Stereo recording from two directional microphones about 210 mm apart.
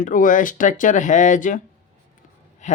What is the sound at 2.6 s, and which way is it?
Speech, 35° left (ahead or behind).